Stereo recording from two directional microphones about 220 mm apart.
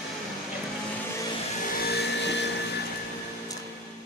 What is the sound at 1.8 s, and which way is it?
Vacuum cleaner, 50° left (ahead or behind).